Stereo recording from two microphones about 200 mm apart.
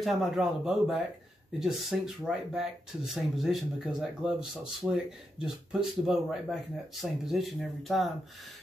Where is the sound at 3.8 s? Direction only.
5° right (ahead or behind).